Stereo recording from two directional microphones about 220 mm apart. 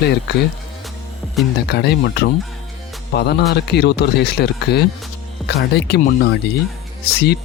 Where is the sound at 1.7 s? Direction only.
50° left (ahead or behind).